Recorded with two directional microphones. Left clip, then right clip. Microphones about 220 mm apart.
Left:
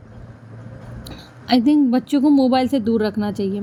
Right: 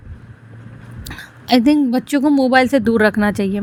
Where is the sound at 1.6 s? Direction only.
75° right (ahead or behind).